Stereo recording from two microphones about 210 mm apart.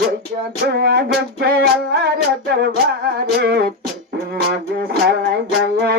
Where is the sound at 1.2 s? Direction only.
55° right (ahead or behind).